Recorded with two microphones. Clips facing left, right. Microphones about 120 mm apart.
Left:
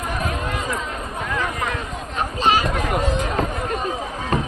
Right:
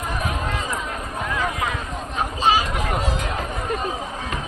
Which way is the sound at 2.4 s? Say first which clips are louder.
Left 1 dB; 10° right (ahead or behind).